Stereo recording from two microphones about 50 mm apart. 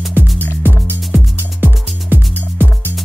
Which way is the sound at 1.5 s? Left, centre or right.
Right.